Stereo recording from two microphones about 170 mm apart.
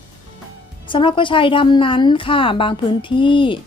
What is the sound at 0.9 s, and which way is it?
A woman's voice, 30° left (ahead or behind).